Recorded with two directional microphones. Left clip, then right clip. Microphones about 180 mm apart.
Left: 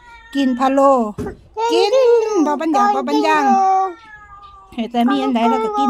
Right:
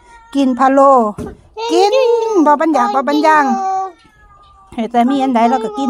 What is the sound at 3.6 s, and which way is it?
Cat, 15° left (ahead or behind).